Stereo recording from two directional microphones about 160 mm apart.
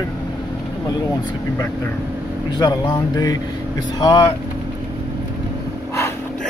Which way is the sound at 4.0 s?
25° left (ahead or behind).